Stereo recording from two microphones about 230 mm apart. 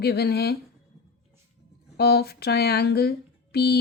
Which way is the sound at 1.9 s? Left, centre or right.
Left.